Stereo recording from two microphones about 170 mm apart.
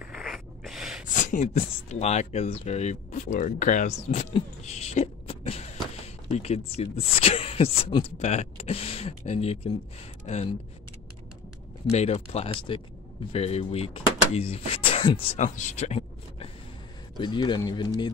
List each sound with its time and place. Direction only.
0.0 s a sound: centre (ahead or behind)
1.0 s speech: 50° left (ahead or behind)
11.9 s speech: 40° left (ahead or behind)
17.2 s speech: 25° left (ahead or behind)